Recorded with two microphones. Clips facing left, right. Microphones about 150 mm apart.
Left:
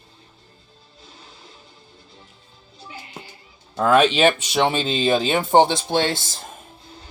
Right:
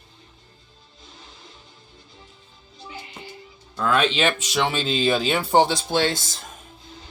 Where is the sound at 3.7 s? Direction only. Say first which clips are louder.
Left 6 dB; 45° left (ahead or behind).